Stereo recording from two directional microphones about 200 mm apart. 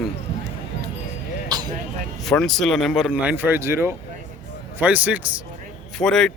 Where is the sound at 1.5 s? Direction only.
20° right (ahead or behind).